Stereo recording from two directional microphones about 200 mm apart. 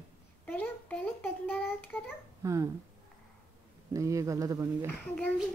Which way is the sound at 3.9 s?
15° right (ahead or behind).